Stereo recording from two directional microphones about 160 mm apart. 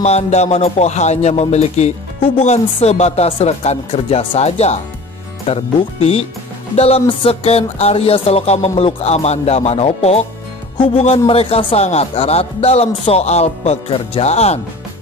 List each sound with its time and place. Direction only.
0.0 s speech: 45° left (ahead or behind)